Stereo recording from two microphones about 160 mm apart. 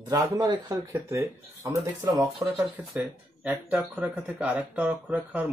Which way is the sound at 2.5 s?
5° right (ahead or behind).